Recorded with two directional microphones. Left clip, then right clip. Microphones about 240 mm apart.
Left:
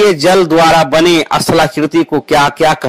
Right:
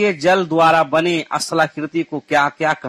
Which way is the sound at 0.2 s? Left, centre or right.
Left.